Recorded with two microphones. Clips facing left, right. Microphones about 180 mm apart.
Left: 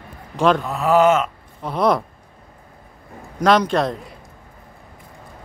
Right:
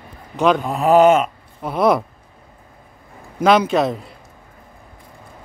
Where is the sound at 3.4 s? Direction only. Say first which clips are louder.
Right 2 dB; 5° right (ahead or behind).